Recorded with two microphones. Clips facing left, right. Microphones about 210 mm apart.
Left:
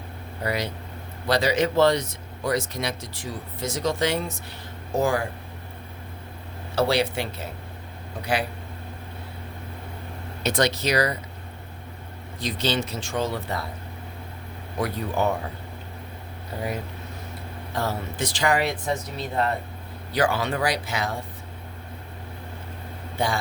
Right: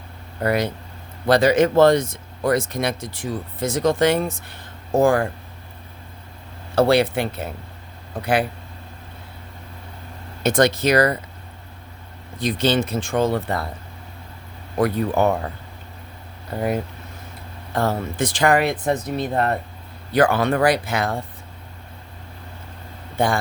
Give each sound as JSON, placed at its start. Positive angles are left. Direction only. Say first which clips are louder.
{"t": 0.4, "sound": "speech", "louder": "right 7 dB", "side_deg": -55}
{"t": 6.7, "sound": "speech", "louder": "right 6 dB", "side_deg": -55}
{"t": 10.4, "sound": "speech", "louder": "right 6 dB", "side_deg": -50}
{"t": 12.4, "sound": "speech", "louder": "right 6 dB", "side_deg": -55}
{"t": 14.8, "sound": "speech", "louder": "right 7 dB", "side_deg": -55}
{"t": 16.6, "sound": "speech", "louder": "right 7 dB", "side_deg": -55}
{"t": 23.1, "sound": "a man's voice", "louder": "right 5 dB", "side_deg": -50}